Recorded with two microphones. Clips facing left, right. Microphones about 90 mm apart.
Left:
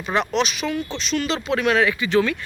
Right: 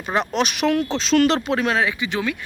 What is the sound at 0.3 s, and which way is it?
Speech, 60° right (ahead or behind).